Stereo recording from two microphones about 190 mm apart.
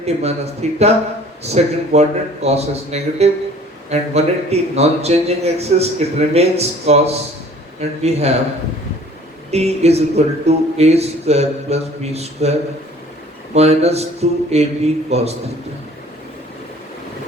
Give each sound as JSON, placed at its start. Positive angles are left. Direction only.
{"t": 0.0, "sound": "a man's voice", "side_deg": -35}
{"t": 9.5, "sound": "a man's voice", "side_deg": -35}